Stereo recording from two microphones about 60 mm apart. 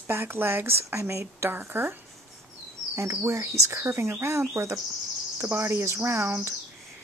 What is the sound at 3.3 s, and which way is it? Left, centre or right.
A woman's voice, right.